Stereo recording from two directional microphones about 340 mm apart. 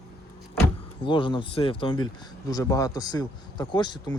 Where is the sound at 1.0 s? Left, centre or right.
Centre.